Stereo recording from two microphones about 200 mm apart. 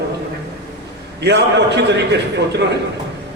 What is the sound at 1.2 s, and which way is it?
Speech, 60° right (ahead or behind).